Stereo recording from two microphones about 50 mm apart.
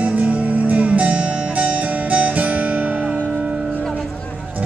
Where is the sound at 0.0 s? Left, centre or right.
Right.